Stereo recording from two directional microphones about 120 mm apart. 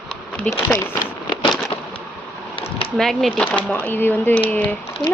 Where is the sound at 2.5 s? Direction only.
50° left (ahead or behind).